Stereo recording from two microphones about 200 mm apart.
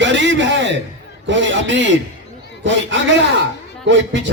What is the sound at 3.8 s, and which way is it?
Speech, 65° right (ahead or behind).